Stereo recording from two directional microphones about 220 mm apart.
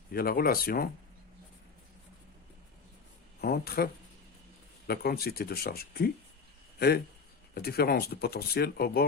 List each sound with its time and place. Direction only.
0.1 s speech: 45° left (ahead or behind)
3.4 s speech: 45° left (ahead or behind)
4.9 s speech: 45° left (ahead or behind)